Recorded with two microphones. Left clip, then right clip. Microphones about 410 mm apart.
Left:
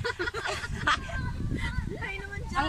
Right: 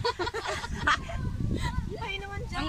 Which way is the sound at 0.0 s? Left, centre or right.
Centre.